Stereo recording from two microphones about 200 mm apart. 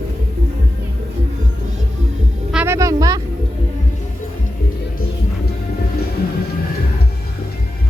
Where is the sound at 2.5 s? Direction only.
10° right (ahead or behind).